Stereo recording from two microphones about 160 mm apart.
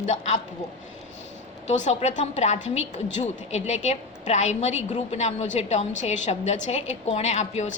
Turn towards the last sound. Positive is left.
turn(degrees=45)  # may be behind; listen again after turning